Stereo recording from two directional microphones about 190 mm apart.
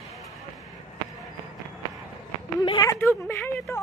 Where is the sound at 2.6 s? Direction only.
20° left (ahead or behind).